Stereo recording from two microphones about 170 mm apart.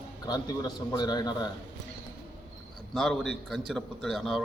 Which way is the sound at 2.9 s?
Centre (ahead or behind).